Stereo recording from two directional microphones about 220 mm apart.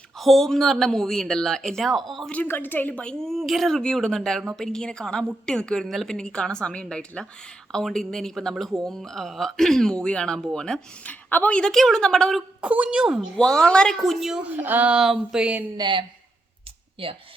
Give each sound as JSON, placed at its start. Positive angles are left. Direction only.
{"t": 0.2, "sound": "speech", "side_deg": 0}
{"t": 15.8, "sound": "speech", "side_deg": -20}